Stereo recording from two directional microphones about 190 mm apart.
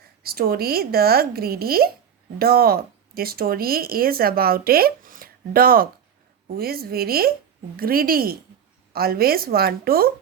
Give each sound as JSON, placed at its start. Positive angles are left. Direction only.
{"t": 0.2, "sound": "speech", "side_deg": -55}